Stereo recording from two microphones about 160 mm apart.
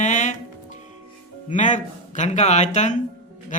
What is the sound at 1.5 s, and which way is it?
Speech, 50° left (ahead or behind).